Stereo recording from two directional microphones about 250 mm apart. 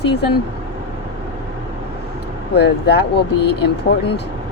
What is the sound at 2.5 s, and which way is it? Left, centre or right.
Speech, left.